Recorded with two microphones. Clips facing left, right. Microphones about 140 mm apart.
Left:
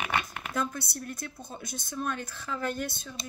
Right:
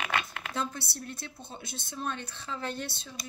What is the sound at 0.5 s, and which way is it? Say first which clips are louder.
Speech: left 3 dB; 25° right (ahead or behind).